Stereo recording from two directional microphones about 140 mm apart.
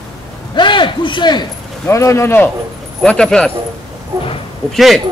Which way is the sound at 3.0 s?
5° left (ahead or behind).